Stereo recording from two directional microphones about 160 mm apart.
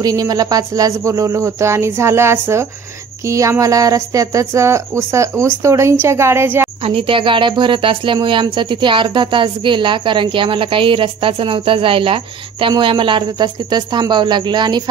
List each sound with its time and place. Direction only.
0.0 s speech: 25° right (ahead or behind)
6.9 s speech: 35° right (ahead or behind)